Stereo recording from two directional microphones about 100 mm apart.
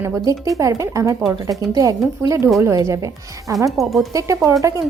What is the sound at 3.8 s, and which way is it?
Speech, centre (ahead or behind).